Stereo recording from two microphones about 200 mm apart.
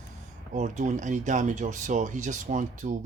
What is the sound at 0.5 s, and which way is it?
Speech, 35° right (ahead or behind).